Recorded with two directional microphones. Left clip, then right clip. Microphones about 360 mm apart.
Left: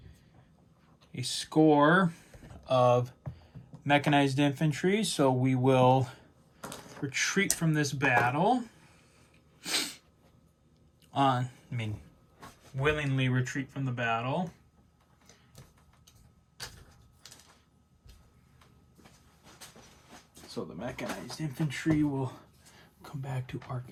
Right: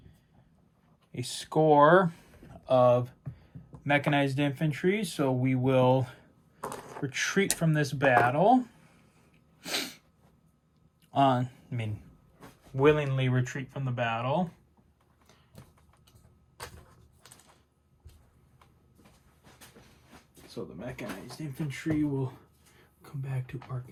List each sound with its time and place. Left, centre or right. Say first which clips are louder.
1.1 s speech: even; centre
9.6 s sneeze: left 1 dB; centre
11.1 s speech: right 2 dB; centre
12.7 s speech: right 6 dB; centre
20.7 s speech: left 2 dB; centre
23.0 s speech: left 2 dB; centre